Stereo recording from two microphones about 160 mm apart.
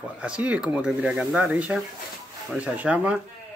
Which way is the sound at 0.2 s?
5° right (ahead or behind).